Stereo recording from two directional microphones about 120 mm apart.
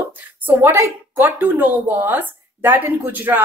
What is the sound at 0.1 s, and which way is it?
A woman's voice, 15° right (ahead or behind).